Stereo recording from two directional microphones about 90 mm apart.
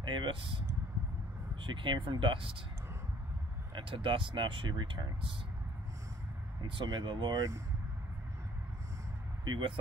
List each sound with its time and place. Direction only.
0.0 s speech: 65° right (ahead or behind)
3.7 s speech: 70° right (ahead or behind)
6.8 s speech: 60° right (ahead or behind)
9.4 s speech: 65° right (ahead or behind)